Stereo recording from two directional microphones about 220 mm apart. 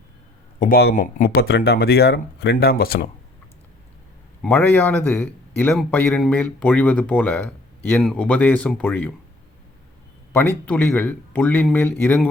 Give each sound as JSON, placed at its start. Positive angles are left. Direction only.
{"t": 0.6, "sound": "speech", "side_deg": 45}
{"t": 4.4, "sound": "a man's voice", "side_deg": 10}
{"t": 10.3, "sound": "a man's voice", "side_deg": 5}